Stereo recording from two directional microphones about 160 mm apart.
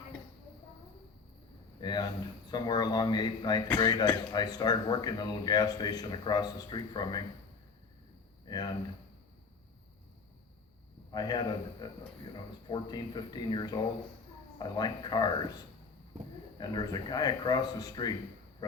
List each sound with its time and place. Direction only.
1.8 s speech: 25° left (ahead or behind)
8.4 s speech: 25° left (ahead or behind)
11.1 s speech: 25° left (ahead or behind)
16.6 s speech: 25° left (ahead or behind)